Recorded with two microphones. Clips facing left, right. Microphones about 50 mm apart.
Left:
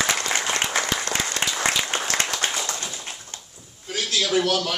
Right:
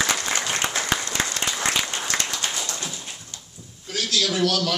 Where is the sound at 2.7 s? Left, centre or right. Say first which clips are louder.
Even; centre.